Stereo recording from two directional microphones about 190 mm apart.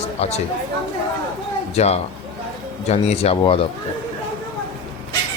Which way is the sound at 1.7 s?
35° left (ahead or behind).